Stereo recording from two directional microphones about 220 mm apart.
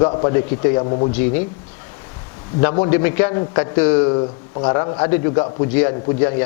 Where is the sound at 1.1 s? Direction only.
10° left (ahead or behind).